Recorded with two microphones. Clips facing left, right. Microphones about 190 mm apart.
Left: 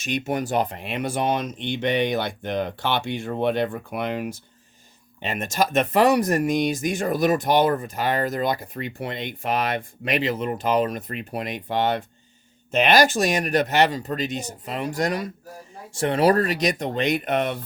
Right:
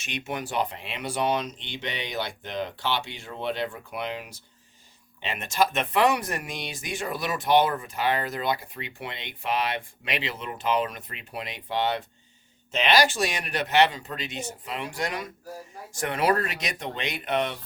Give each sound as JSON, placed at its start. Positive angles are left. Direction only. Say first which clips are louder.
{"t": 0.0, "sound": "speech", "louder": "left 8 dB", "side_deg": 40}
{"t": 15.9, "sound": "speech", "louder": "left 6 dB", "side_deg": 30}